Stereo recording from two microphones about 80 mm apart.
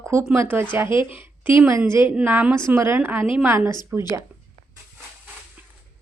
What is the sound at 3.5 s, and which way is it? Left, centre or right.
Speech, right.